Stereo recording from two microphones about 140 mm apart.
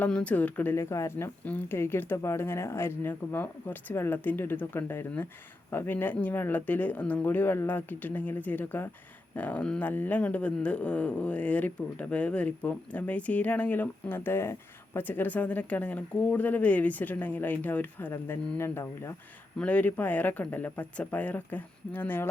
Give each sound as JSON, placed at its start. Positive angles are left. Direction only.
{"t": 0.0, "sound": "a woman's voice", "side_deg": 10}